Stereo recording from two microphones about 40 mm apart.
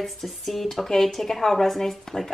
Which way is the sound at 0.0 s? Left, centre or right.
Centre.